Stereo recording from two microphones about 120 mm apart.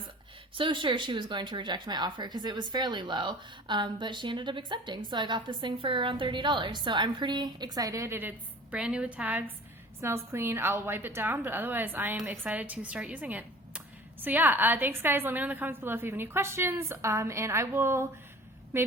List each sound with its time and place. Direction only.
0.5 s speech: 45° right (ahead or behind); by 8.3 s 20° right (ahead or behind)
8.7 s a woman's voice: 10° right (ahead or behind)